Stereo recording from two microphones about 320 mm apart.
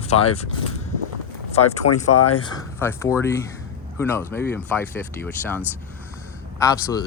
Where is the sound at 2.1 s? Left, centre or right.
Left.